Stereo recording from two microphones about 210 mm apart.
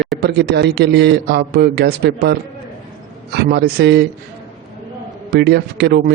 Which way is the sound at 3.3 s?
50° right (ahead or behind).